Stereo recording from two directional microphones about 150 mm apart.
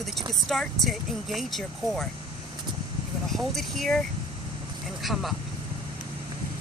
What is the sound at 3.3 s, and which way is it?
Speech, centre (ahead or behind).